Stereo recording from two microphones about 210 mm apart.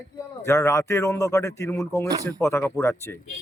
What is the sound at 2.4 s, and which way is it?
Speech, 15° left (ahead or behind).